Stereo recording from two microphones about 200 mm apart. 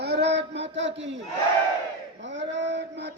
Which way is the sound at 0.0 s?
55° right (ahead or behind).